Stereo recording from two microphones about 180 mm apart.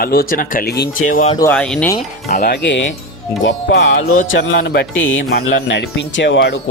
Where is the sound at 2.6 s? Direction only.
80° left.